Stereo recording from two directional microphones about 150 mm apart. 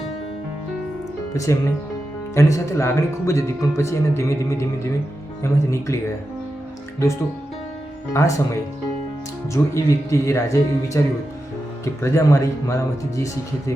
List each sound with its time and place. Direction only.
1.3 s speech: 20° left (ahead or behind)
8.1 s speech: 20° left (ahead or behind)
9.5 s speech: 20° left (ahead or behind)
12.0 s speech: 20° left (ahead or behind)